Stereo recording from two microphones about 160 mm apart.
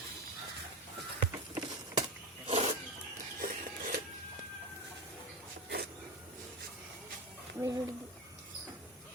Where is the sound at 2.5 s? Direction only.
40° right (ahead or behind).